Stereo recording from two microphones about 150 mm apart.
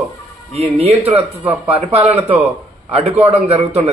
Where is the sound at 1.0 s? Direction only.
10° right (ahead or behind).